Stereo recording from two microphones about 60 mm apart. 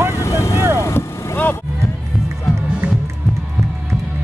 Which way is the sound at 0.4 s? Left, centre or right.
Left.